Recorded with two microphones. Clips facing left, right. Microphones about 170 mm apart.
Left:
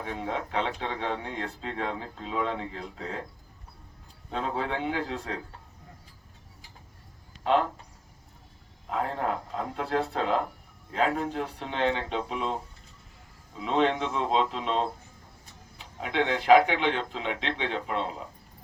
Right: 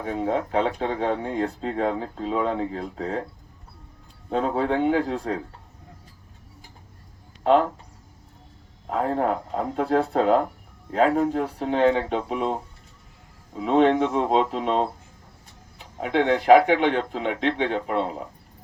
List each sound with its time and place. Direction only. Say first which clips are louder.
0.0 s speech: right 7 dB; 40° right (ahead or behind)
4.3 s speech: right 7 dB; 40° right (ahead or behind)
8.9 s speech: right 6 dB; 40° right (ahead or behind)
13.6 s speech: right 7 dB; 50° right (ahead or behind)
16.0 s speech: right 6 dB; 45° right (ahead or behind)